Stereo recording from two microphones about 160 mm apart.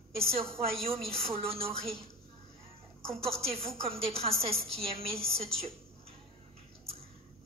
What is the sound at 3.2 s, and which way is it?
A woman's voice, 35° right (ahead or behind).